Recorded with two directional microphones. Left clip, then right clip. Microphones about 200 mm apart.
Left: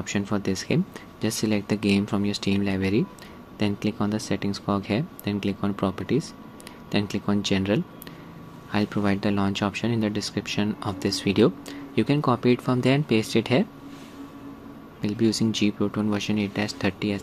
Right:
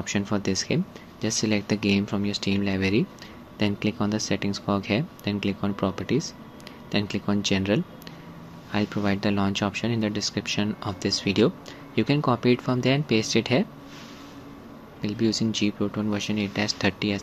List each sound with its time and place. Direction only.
0.0 s speech: centre (ahead or behind)
15.0 s speech: 10° left (ahead or behind)